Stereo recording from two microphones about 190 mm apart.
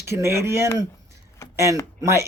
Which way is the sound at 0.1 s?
15° right (ahead or behind).